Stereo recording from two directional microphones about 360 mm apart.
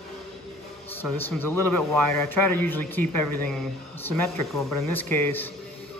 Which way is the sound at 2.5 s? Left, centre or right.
Centre.